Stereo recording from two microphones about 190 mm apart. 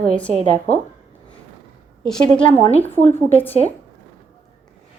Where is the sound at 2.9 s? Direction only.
10° left (ahead or behind).